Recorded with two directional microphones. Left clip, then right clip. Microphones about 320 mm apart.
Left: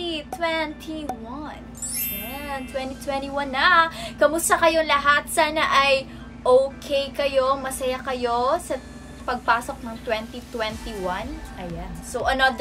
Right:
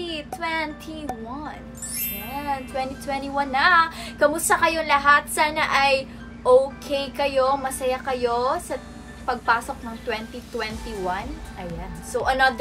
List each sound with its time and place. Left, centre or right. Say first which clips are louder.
0.0 s a woman's voice: left 3 dB; centre